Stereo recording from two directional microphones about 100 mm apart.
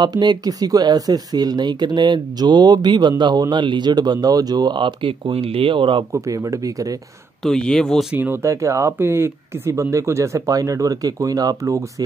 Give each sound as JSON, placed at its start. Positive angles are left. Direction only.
{"t": 0.0, "sound": "speech", "side_deg": -45}
{"t": 6.1, "sound": "speech", "side_deg": -35}
{"t": 7.4, "sound": "speech", "side_deg": 5}
{"t": 8.1, "sound": "speech", "side_deg": -20}